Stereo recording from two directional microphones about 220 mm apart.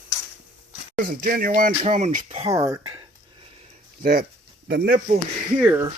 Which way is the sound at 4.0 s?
40° right (ahead or behind).